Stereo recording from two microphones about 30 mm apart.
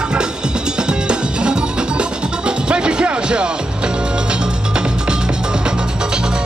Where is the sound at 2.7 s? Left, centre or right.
Right.